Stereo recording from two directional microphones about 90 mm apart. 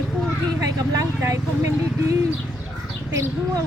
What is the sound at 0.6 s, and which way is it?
Vehicle, 45° right (ahead or behind).